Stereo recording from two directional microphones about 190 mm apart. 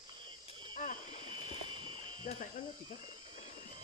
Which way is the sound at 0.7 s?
45° left (ahead or behind).